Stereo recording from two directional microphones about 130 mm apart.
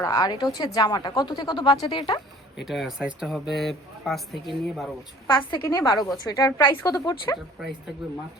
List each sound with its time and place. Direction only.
0.0 s speech: 30° left (ahead or behind)
2.6 s speech: centre (ahead or behind)
5.3 s a woman's voice: 35° left (ahead or behind)
7.6 s speech: centre (ahead or behind)